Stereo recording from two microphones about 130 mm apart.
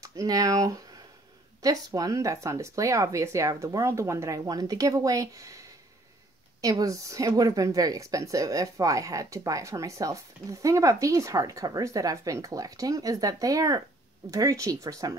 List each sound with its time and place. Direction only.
0.0 s speech: 25° right (ahead or behind)